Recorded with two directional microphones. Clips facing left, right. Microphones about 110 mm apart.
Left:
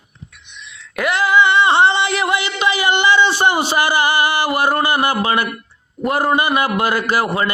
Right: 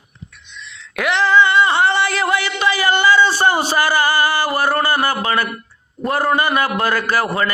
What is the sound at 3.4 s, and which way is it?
A man's voice, 15° left (ahead or behind).